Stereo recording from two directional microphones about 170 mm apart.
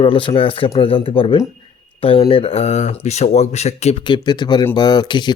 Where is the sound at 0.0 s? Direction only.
30° left (ahead or behind).